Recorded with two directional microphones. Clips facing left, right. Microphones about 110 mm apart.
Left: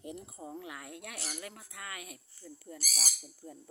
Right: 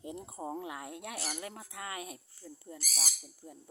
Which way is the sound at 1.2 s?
40° right (ahead or behind).